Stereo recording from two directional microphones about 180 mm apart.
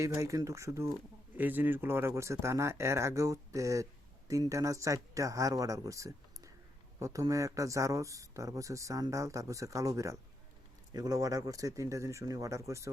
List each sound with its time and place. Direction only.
0.0 s speech: 15° right (ahead or behind)